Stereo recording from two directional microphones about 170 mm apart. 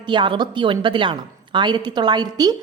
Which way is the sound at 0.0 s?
30° right (ahead or behind).